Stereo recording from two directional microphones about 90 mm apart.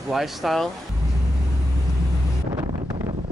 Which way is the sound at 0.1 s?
Centre (ahead or behind).